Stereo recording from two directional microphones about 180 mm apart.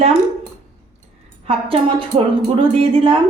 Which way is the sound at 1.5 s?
30° right (ahead or behind).